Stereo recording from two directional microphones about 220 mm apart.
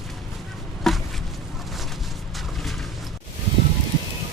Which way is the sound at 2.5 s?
Centre (ahead or behind).